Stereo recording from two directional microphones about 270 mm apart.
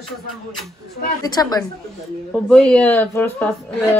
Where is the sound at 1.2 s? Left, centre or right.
Centre.